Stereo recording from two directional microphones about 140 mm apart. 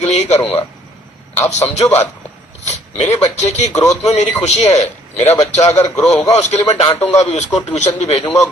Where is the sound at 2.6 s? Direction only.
55° left (ahead or behind).